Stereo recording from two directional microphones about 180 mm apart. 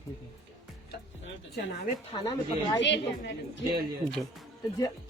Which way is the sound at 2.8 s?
90° left.